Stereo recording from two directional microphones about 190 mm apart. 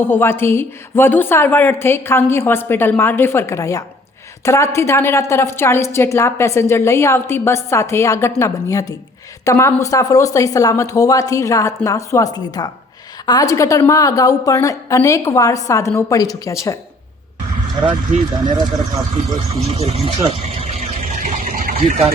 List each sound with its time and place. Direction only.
0.0 s a woman's voice: 10° left (ahead or behind)
19.5 s vehicle: 30° right (ahead or behind)